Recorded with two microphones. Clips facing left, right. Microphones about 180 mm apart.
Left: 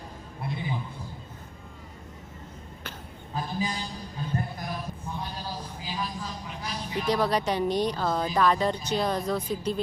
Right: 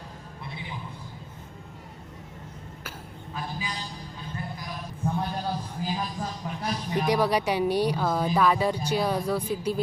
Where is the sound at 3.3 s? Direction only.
40° left (ahead or behind).